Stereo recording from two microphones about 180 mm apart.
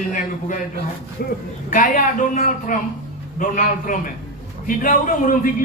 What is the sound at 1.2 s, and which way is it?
Speech, 60° left (ahead or behind).